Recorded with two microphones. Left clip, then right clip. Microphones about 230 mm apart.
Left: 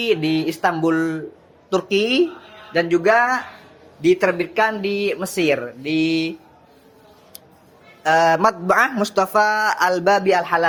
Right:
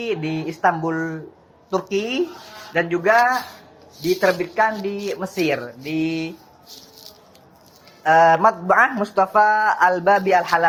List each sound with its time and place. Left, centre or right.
0.0 s a woman's voice: left
8.0 s a woman's voice: left